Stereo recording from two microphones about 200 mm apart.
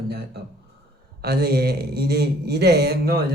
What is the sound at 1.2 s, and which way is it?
Speech, 50° right (ahead or behind).